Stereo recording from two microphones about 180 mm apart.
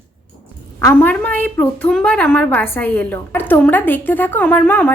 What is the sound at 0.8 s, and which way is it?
A woman's voice, 15° left (ahead or behind).